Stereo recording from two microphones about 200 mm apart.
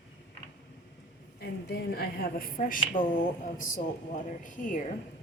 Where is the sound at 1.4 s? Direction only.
55° left (ahead or behind).